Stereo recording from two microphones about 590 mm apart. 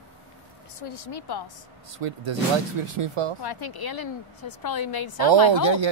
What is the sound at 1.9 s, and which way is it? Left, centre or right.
Speech, right.